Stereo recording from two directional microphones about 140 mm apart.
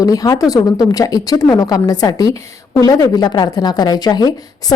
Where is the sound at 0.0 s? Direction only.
25° left (ahead or behind).